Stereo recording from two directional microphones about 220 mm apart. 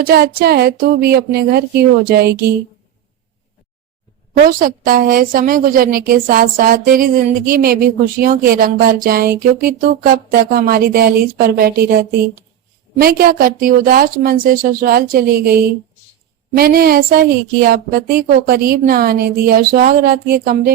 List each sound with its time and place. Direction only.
0.0 s a woman's voice: 45° right (ahead or behind)
4.4 s a woman's voice: 40° right (ahead or behind)
16.6 s a woman's voice: 45° right (ahead or behind)